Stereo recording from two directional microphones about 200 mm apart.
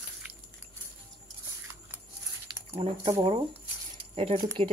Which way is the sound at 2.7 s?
25° right (ahead or behind).